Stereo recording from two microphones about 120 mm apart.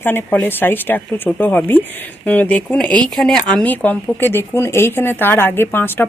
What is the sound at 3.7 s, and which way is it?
Speech, 15° left (ahead or behind).